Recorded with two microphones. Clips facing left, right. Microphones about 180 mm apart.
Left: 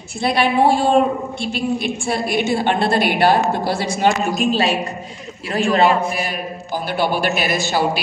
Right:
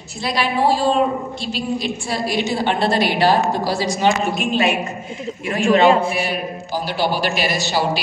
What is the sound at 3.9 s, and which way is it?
A woman's voice, 45° left (ahead or behind).